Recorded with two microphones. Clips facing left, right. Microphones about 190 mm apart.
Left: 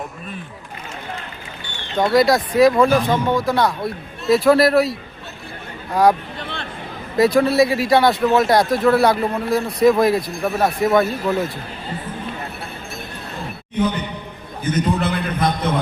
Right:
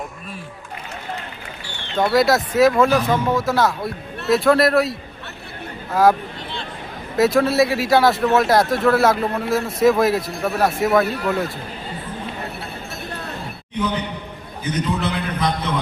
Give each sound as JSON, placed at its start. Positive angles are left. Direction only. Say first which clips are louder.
{"t": 2.0, "sound": "speech", "louder": "left 1 dB", "side_deg": 0}
{"t": 7.2, "sound": "speech", "louder": "left 1 dB", "side_deg": 0}
{"t": 14.6, "sound": "a man's voice", "louder": "left 3 dB", "side_deg": 50}